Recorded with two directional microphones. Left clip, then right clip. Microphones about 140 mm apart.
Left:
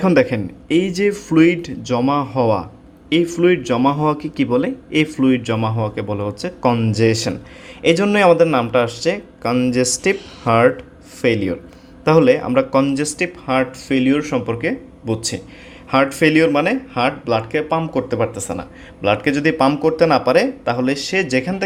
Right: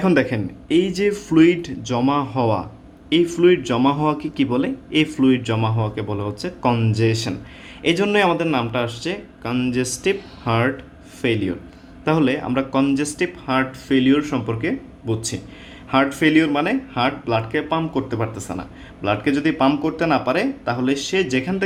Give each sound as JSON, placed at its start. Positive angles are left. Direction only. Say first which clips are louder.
{"t": 0.0, "sound": "speech", "louder": "left 4 dB", "side_deg": 30}